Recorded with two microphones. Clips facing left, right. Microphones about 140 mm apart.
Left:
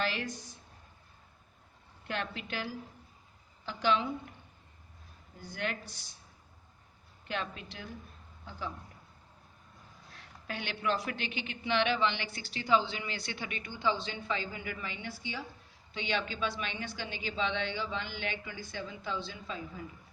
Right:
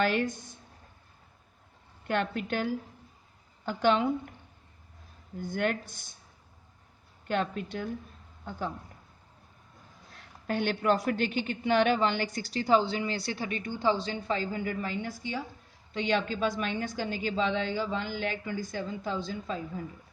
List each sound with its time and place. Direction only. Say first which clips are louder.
0.0 s a woman's voice: right 7 dB; 55° right (ahead or behind)
2.0 s a woman's voice: right 8 dB; 50° right (ahead or behind)
5.4 s a woman's voice: right 8 dB; 50° right (ahead or behind)
7.3 s a woman's voice: right 8 dB; 50° right (ahead or behind)
10.4 s a woman's voice: right 8 dB; 45° right (ahead or behind)